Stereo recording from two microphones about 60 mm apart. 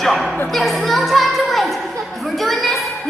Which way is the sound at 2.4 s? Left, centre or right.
Centre.